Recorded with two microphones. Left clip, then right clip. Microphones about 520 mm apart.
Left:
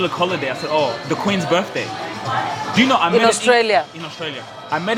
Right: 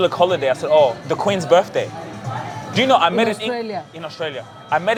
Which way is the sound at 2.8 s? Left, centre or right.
Right.